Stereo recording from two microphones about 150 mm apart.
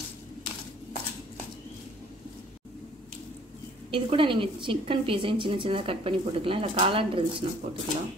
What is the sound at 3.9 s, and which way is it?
A woman's voice, 35° right (ahead or behind).